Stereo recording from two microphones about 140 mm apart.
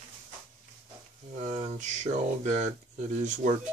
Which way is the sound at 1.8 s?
60° right (ahead or behind).